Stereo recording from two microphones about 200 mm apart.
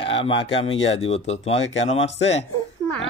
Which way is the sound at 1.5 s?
65° left (ahead or behind).